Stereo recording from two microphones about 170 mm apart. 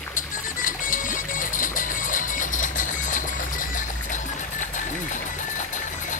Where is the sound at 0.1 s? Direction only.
50° left (ahead or behind).